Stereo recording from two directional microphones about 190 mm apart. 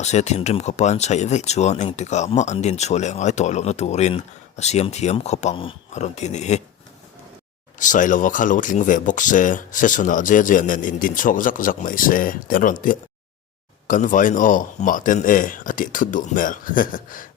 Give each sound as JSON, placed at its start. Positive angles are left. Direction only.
{"t": 0.0, "sound": "speech", "side_deg": 35}
{"t": 7.8, "sound": "speech", "side_deg": 45}